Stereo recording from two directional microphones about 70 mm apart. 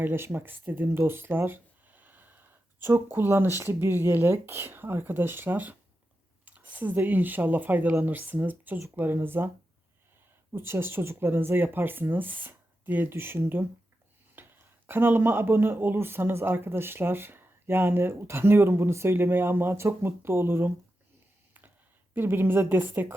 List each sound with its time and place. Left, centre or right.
0.0 s speech: right
10.5 s speech: right
22.1 s speech: right